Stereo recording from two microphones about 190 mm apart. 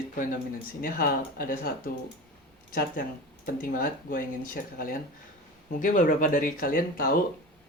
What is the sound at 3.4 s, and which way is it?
Speech, 50° left (ahead or behind).